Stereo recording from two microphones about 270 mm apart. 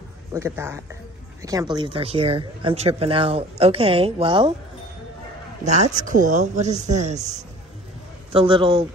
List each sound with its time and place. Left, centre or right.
0.3 s speech: centre
5.6 s speech: right